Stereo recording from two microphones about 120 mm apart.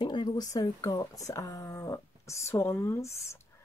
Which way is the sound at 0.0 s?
40° left (ahead or behind).